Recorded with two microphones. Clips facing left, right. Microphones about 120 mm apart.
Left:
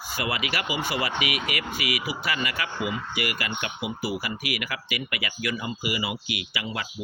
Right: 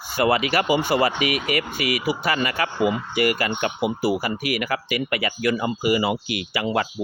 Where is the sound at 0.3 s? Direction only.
45° right (ahead or behind).